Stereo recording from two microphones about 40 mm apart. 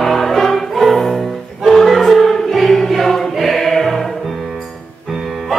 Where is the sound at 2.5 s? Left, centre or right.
Centre.